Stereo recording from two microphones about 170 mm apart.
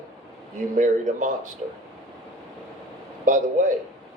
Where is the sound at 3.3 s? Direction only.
45° right (ahead or behind).